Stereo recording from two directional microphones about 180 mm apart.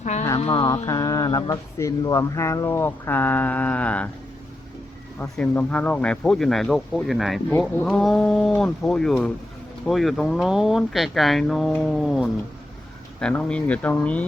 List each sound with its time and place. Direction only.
0.0 s music: 40° left (ahead or behind)
0.3 s speech: 30° left (ahead or behind); by 4.1 s 5° left (ahead or behind)
5.2 s speech: 10° left (ahead or behind)